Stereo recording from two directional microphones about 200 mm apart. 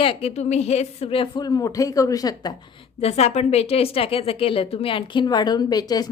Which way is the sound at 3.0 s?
30° left (ahead or behind).